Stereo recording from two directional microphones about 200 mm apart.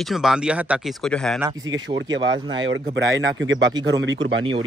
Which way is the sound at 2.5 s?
75° right (ahead or behind).